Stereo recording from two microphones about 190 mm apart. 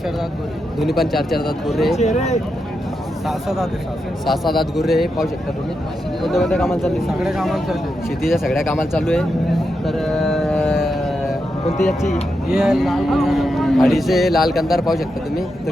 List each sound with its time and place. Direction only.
0.8 s speech: centre (ahead or behind)
2.0 s speech: 35° left (ahead or behind)
3.2 s speech: centre (ahead or behind)
9.8 s a sound: centre (ahead or behind)
12.5 s speech: centre (ahead or behind)